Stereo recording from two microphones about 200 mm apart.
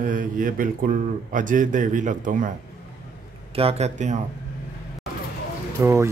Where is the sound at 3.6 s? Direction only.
30° right (ahead or behind).